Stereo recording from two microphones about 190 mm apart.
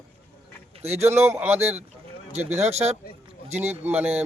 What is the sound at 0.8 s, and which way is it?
Speech, 35° right (ahead or behind).